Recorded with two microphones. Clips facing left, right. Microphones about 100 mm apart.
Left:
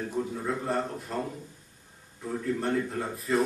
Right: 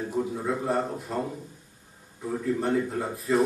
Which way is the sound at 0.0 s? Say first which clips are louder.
Right 3 dB; 5° right (ahead or behind).